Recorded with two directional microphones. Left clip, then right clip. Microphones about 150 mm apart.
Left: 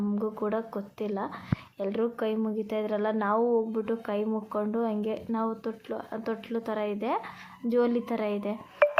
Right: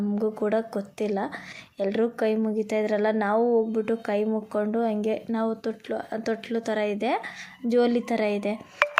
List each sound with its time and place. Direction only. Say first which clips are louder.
0.2 s a woman's voice: right 7 dB; 25° right (ahead or behind)